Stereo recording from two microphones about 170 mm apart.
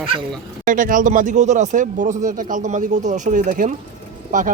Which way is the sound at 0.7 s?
50° right (ahead or behind).